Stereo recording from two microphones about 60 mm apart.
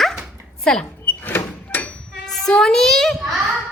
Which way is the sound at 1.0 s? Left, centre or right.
Left.